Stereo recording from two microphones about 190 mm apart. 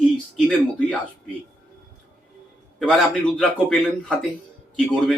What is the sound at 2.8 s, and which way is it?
A man's voice, centre (ahead or behind).